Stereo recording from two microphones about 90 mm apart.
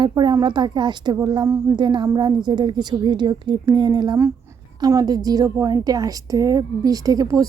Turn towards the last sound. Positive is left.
turn(degrees=-40)  # may be behind; listen again after turning